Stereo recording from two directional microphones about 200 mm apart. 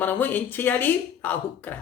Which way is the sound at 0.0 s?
10° left (ahead or behind).